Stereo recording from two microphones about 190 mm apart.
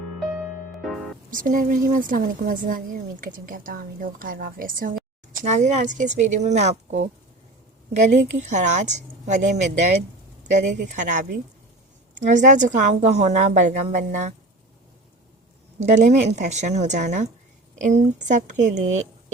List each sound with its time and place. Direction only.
1.3 s a woman's voice: 45° right (ahead or behind)
15.8 s a woman's voice: 40° right (ahead or behind)